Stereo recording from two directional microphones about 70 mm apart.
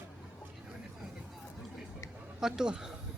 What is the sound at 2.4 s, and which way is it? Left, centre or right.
Speech, centre.